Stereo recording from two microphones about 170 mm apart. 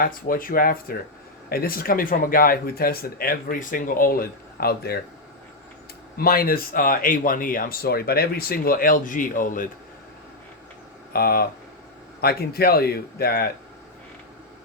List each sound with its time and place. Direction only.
0.0 s speech: 55° left (ahead or behind)
6.1 s speech: 60° left (ahead or behind)
11.1 s speech: 65° left (ahead or behind)